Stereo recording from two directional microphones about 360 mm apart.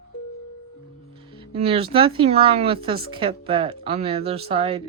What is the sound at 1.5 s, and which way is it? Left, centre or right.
Speech, centre.